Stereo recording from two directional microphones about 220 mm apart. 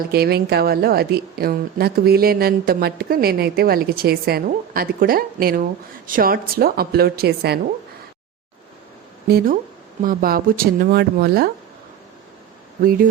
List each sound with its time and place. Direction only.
0.1 s speech: 45° right (ahead or behind)
9.3 s speech: 40° right (ahead or behind)
12.8 s speech: 40° right (ahead or behind)